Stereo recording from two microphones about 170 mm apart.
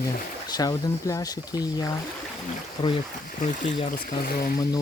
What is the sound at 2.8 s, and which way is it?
Speech, 40° left (ahead or behind).